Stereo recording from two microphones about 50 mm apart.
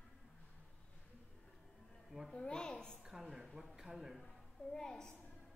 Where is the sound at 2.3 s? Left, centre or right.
Centre.